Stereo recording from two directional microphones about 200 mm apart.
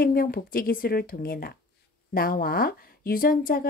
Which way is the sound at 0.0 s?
45° left (ahead or behind).